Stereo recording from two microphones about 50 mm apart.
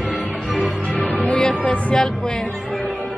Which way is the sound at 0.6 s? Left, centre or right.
Left.